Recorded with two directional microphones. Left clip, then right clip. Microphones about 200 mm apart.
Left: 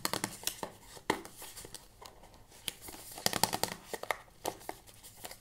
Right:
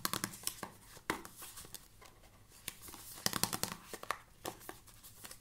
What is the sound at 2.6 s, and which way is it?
Tearing, 20° right (ahead or behind).